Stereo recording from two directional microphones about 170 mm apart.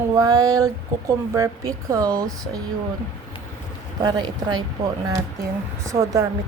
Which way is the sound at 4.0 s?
25° right (ahead or behind).